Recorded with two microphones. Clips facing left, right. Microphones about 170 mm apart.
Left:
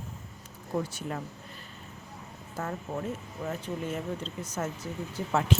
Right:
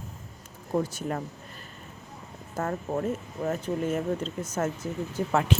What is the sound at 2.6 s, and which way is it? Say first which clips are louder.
Speech: right 5 dB; 50° right (ahead or behind).